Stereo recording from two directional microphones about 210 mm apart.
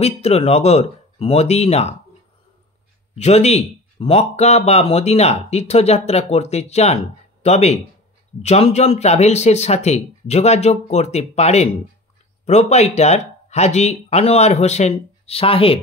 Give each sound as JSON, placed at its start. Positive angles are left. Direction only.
{"t": 0.0, "sound": "speech", "side_deg": 30}
{"t": 3.2, "sound": "speech", "side_deg": 30}